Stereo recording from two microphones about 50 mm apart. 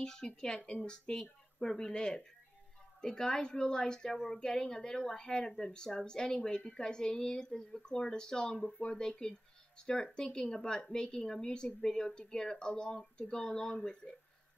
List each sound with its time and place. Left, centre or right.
0.0 s a woman's voice: centre